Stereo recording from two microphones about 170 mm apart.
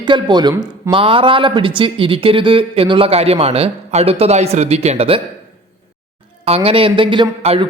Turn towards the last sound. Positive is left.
turn(degrees=-30)  # may be behind; listen again after turning